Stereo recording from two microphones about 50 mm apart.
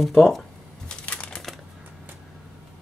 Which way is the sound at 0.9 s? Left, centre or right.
Left.